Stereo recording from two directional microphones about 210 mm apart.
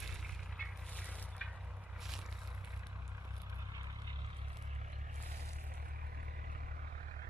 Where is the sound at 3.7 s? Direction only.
20° right (ahead or behind).